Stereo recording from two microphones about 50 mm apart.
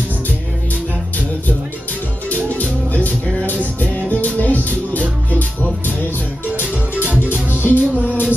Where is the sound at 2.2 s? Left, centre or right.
Left.